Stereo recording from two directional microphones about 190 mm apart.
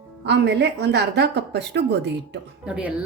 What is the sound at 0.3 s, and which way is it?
A woman's voice, 65° right (ahead or behind).